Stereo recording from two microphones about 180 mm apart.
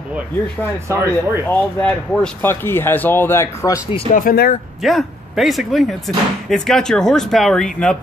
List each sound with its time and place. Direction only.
0.8 s speech: 15° right (ahead or behind)
1.5 s speech: 5° left (ahead or behind)
4.1 s speech: 50° left (ahead or behind)
4.8 s speech: centre (ahead or behind)